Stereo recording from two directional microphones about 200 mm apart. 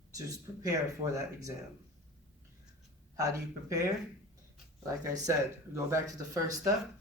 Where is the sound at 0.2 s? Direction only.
15° right (ahead or behind).